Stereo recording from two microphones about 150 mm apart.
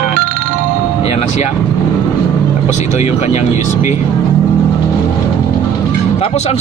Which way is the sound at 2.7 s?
50° left (ahead or behind).